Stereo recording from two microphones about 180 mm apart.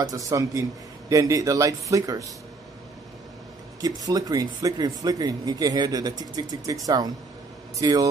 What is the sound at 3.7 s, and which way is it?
A man's voice, 20° right (ahead or behind).